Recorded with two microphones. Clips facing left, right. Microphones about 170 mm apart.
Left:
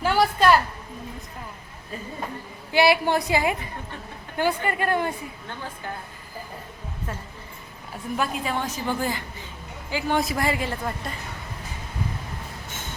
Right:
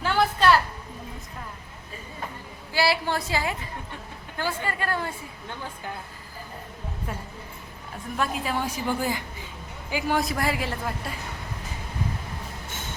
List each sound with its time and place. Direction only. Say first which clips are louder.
0.0 s a woman's voice: left 2 dB; 10° left (ahead or behind)
2.7 s a woman's voice: left 5 dB; 20° left (ahead or behind)
8.1 s a woman's voice: left 1 dB; 5° left (ahead or behind)
8.6 s a woman's voice: even; 10° right (ahead or behind)
10.2 s a woman's voice: left 2 dB; centre (ahead or behind)